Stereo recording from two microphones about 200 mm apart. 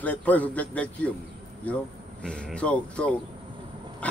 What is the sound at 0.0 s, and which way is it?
A man's voice, 10° left (ahead or behind).